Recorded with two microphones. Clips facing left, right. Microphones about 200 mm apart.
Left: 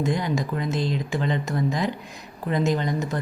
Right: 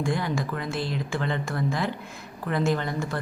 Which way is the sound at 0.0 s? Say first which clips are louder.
Left 2 dB; 20° left (ahead or behind).